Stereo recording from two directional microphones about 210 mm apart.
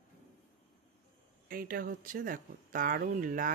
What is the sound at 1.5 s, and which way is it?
Speech, 45° right (ahead or behind).